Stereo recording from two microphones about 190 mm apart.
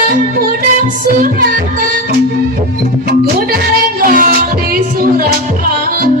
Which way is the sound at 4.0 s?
50° right (ahead or behind).